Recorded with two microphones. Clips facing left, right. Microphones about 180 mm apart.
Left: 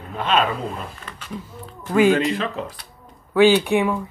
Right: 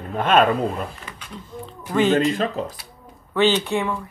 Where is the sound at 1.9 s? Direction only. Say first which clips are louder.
Left 2 dB; 10° left (ahead or behind).